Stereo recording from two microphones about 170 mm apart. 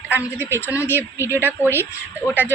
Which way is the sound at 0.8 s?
15° left (ahead or behind).